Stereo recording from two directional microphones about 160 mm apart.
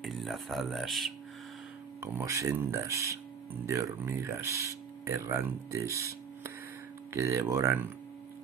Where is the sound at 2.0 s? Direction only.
15° right (ahead or behind).